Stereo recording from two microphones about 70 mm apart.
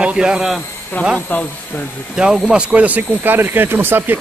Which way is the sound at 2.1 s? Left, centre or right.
Centre.